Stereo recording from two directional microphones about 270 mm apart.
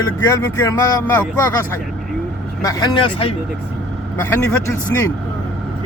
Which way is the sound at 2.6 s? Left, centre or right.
Centre.